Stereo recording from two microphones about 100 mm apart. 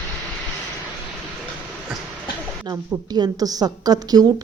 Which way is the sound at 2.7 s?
40° right (ahead or behind).